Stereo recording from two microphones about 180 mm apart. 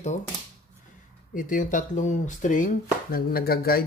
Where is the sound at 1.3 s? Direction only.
45° left (ahead or behind).